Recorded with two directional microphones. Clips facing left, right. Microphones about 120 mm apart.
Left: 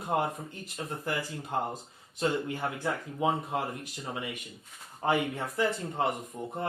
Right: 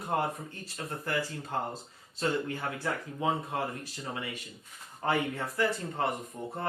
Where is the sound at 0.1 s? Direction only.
20° left (ahead or behind).